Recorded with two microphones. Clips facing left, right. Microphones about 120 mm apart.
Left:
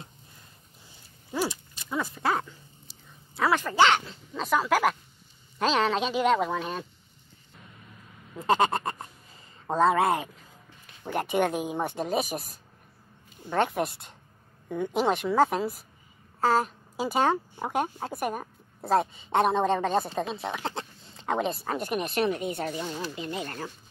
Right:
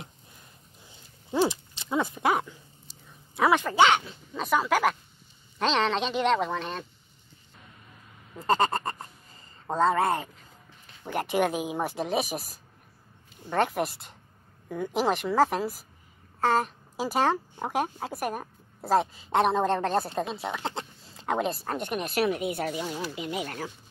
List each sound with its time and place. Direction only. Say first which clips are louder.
1.3 s speech: right 5 dB; 25° right (ahead or behind)
3.6 s speech: right 1 dB; 5° right (ahead or behind)
8.4 s a sound: left 1 dB; centre (ahead or behind)
11.1 s speech: even; centre (ahead or behind)